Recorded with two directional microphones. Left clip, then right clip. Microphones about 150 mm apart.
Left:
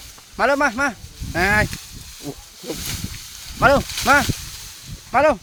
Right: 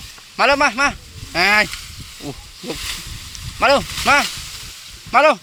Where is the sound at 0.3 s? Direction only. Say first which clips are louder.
Right 3 dB; 20° left (ahead or behind).